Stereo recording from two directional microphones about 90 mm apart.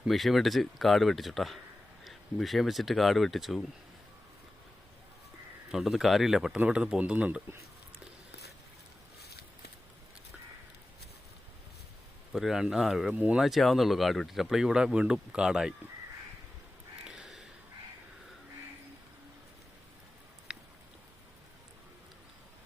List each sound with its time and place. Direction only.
0.1 s speech: centre (ahead or behind)
5.7 s speech: 5° right (ahead or behind)
12.3 s speech: 5° right (ahead or behind)
13.1 s speech: 15° right (ahead or behind)
13.4 s speech: centre (ahead or behind)
17.0 s a sound: 5° right (ahead or behind)
20.5 s a sound: 10° right (ahead or behind)